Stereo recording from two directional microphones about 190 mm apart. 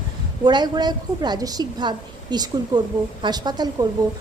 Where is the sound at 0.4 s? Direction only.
20° right (ahead or behind).